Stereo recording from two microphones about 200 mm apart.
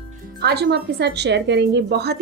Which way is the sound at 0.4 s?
55° right (ahead or behind).